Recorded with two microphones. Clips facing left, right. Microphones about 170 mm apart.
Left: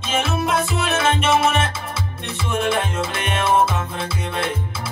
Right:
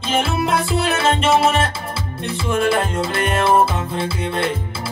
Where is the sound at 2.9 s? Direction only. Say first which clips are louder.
Right 4 dB; 30° right (ahead or behind).